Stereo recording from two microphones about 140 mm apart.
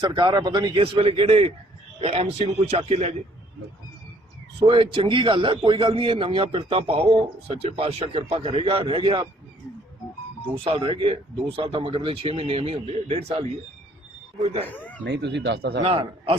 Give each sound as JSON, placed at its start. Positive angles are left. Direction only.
{"t": 0.0, "sound": "a man's voice", "side_deg": -35}
{"t": 4.6, "sound": "a man's voice", "side_deg": -40}
{"t": 10.6, "sound": "a man's voice", "side_deg": -40}
{"t": 14.4, "sound": "a man's voice", "side_deg": -45}
{"t": 14.7, "sound": "speech", "side_deg": 10}
{"t": 15.8, "sound": "a man's voice", "side_deg": -40}